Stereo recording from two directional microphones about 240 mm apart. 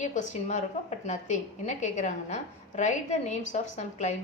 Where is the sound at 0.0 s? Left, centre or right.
Left.